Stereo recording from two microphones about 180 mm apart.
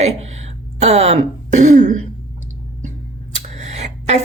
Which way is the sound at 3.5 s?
40° right (ahead or behind).